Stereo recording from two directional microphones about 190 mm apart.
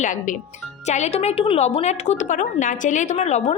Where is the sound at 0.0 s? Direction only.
45° left (ahead or behind).